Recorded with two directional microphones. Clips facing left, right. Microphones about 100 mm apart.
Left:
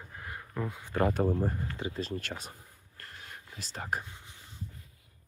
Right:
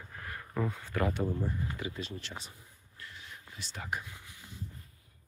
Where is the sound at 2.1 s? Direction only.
50° left (ahead or behind).